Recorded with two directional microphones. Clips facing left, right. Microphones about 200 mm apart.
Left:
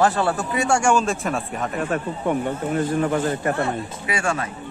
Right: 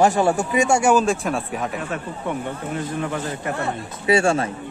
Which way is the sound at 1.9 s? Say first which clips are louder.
Left 4 dB; 50° left (ahead or behind).